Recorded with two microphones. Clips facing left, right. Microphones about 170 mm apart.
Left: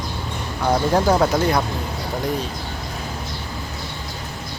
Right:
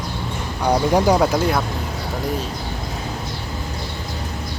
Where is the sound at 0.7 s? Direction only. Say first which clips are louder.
Right 1 dB; 15° right (ahead or behind).